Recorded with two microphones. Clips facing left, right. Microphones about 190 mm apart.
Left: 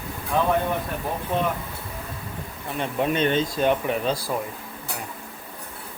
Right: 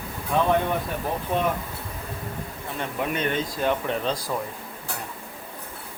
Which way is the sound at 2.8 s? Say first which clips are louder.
Left 4 dB; 25° left (ahead or behind).